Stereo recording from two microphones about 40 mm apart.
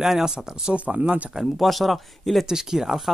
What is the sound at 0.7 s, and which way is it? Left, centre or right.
Speech, right.